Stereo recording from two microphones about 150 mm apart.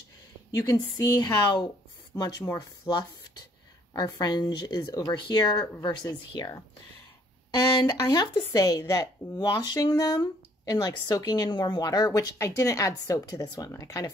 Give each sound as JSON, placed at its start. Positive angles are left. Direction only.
{"t": 0.5, "sound": "speech", "side_deg": 25}
{"t": 7.8, "sound": "speech", "side_deg": 25}